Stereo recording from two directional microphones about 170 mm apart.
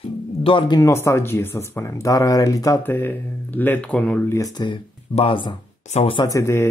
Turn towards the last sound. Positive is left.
turn(degrees=15)  # may be behind; listen again after turning